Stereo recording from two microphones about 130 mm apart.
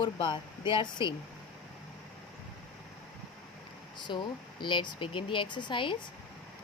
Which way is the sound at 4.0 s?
35° left (ahead or behind).